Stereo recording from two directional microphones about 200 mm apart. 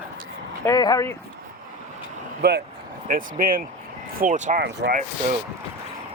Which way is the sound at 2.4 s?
55° right (ahead or behind).